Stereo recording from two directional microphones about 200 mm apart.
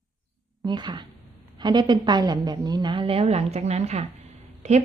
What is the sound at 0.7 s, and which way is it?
A woman's voice, 20° right (ahead or behind).